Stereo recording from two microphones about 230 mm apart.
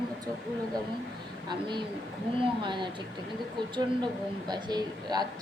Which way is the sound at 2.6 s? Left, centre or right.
Right.